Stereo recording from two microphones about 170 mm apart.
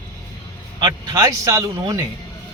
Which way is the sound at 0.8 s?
20° right (ahead or behind).